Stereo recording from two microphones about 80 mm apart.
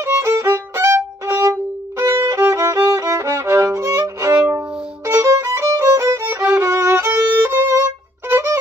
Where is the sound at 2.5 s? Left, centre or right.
Right.